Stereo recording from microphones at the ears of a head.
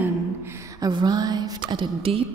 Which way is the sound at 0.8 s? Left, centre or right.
Right.